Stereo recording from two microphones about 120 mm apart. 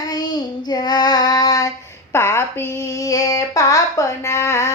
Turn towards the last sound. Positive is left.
turn(degrees=25)  # may be behind; listen again after turning